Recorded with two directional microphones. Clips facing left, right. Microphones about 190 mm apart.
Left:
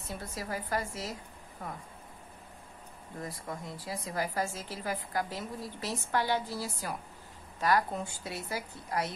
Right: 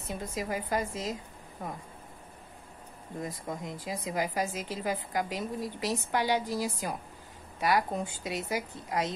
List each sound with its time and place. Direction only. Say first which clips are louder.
0.1 s speech: right 4 dB; 20° right (ahead or behind)
3.2 s speech: right 3 dB; 20° right (ahead or behind)